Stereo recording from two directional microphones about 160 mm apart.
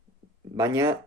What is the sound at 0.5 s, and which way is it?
Speech, 20° right (ahead or behind).